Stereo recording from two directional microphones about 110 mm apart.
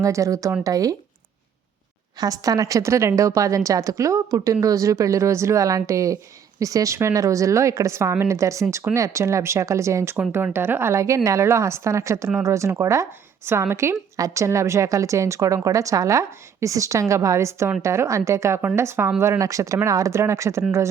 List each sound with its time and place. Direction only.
0.0 s speech: 30° right (ahead or behind)
2.1 s a woman's voice: 35° right (ahead or behind)